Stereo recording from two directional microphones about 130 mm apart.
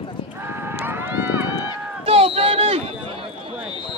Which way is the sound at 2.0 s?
45° right (ahead or behind).